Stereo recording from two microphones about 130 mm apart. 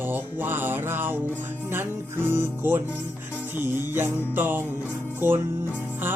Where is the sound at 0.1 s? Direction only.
15° right (ahead or behind).